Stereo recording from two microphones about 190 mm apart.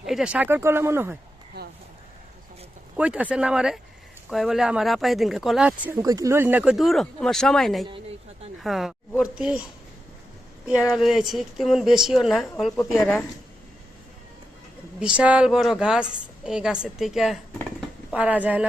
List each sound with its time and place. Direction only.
0.0 s speech: centre (ahead or behind)
1.5 s a sound: 60° right (ahead or behind)
3.0 s speech: 5° right (ahead or behind)
10.9 s speech: centre (ahead or behind)
14.9 s speech: 5° right (ahead or behind)